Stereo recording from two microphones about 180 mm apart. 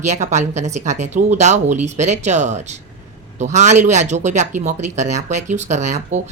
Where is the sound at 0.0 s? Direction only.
40° right (ahead or behind).